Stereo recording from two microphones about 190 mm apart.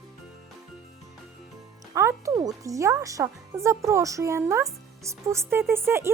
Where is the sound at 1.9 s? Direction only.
15° right (ahead or behind).